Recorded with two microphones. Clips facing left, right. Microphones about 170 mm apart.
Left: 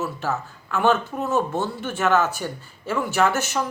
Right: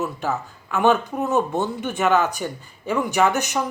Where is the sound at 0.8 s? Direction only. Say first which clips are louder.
Right 2 dB; 15° right (ahead or behind).